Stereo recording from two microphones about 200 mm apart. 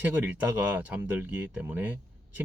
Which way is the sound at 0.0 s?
10° right (ahead or behind).